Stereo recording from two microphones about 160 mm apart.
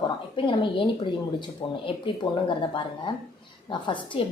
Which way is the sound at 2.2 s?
30° left (ahead or behind).